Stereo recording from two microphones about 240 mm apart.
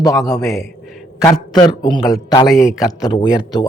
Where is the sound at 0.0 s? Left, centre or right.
Centre.